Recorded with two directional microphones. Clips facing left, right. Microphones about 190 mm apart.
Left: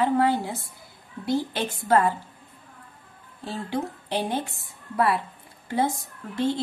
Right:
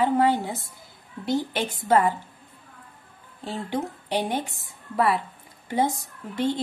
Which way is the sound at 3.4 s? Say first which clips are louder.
Even; 20° right (ahead or behind).